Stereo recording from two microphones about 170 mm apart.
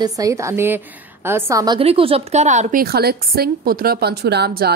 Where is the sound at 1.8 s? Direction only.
35° right (ahead or behind).